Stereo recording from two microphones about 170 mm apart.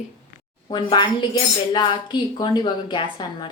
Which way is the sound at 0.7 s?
25° left (ahead or behind).